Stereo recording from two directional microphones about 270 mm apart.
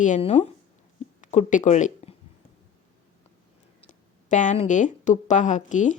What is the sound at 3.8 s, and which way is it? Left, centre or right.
Speech, left.